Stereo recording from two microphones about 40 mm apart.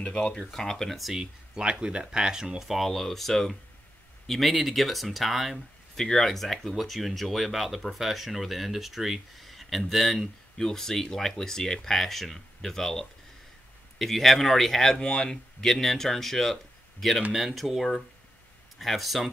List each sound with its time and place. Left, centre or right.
0.0 s speech: left
1.1 s speech: centre
2.9 s speech: centre
5.9 s speech: centre